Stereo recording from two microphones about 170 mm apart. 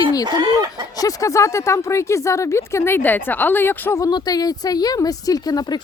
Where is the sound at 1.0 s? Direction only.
20° left (ahead or behind).